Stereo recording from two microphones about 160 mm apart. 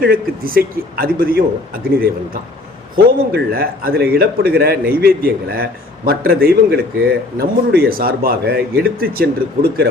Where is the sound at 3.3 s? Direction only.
80° right.